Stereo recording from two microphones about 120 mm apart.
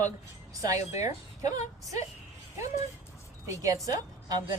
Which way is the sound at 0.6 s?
30° right (ahead or behind).